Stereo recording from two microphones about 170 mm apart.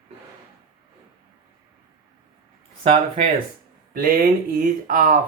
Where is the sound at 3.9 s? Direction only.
55° right (ahead or behind).